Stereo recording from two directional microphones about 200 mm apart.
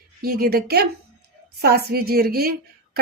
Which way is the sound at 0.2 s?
50° right (ahead or behind).